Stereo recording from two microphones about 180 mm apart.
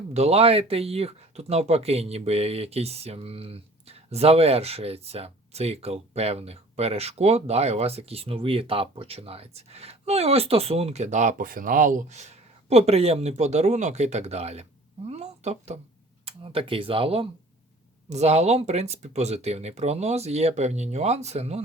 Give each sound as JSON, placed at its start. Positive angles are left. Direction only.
{"t": 0.1, "sound": "speech", "side_deg": -35}